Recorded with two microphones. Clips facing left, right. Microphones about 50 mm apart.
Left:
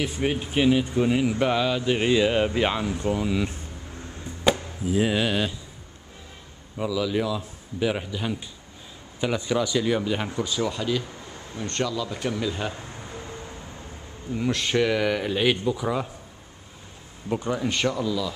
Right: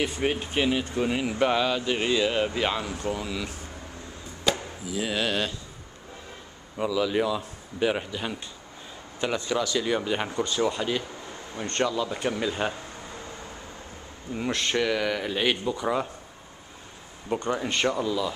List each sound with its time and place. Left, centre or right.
0.0 s speech: centre
1.9 s speech: centre
4.9 s speech: centre
6.8 s speech: centre
9.4 s speech: centre
9.8 s speech: centre
10.6 s speech: centre
14.3 s speech: centre
17.3 s speech: centre
17.8 s speech: centre